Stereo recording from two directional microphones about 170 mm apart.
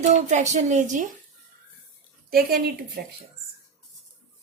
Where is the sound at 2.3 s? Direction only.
60° right (ahead or behind).